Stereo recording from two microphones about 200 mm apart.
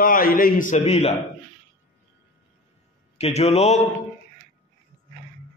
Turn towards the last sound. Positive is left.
turn(degrees=35)  # may be behind; listen again after turning